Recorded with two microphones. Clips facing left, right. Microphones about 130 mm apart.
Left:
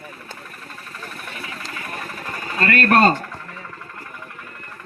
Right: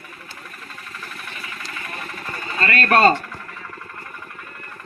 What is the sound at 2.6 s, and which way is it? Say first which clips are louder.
Pigeon: even; 50° left (ahead or behind).